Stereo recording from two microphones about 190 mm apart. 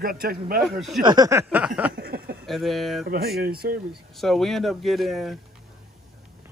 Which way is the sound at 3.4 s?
55° right (ahead or behind).